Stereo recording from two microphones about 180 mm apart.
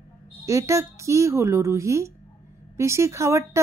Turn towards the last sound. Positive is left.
turn(degrees=-15)  # may be behind; listen again after turning